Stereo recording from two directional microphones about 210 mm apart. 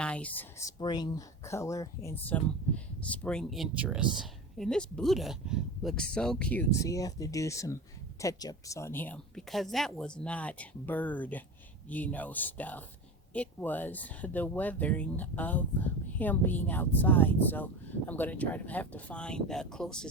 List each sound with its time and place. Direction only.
0.0 s speech: 5° left (ahead or behind)
0.8 s speech: 20° left (ahead or behind); by 20.1 s 5° left (ahead or behind)